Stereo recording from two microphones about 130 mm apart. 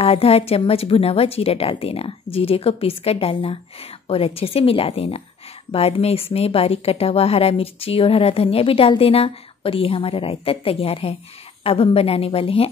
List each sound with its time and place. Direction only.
0.0 s speech: 50° left (ahead or behind)